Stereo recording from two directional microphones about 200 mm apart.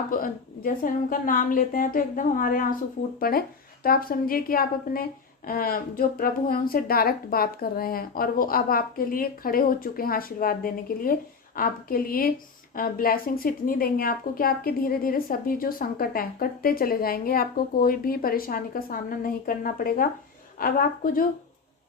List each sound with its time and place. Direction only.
0.1 s a woman's voice: 45° left (ahead or behind)